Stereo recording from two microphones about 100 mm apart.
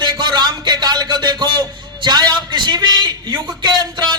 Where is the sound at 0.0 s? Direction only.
45° right (ahead or behind).